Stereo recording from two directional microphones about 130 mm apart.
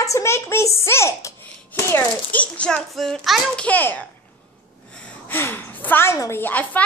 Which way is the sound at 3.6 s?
15° left (ahead or behind).